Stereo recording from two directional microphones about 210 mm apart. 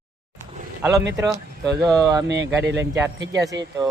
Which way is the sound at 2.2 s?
55° right (ahead or behind).